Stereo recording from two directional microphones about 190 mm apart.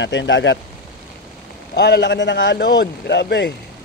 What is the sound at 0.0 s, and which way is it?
Speech, 75° left (ahead or behind).